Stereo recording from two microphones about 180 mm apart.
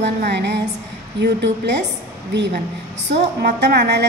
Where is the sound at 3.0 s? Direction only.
70° right (ahead or behind).